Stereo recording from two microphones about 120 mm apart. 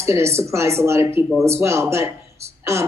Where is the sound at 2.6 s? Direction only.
25° right (ahead or behind).